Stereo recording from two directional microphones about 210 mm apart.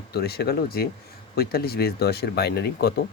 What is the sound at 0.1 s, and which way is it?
Speech, 50° left (ahead or behind).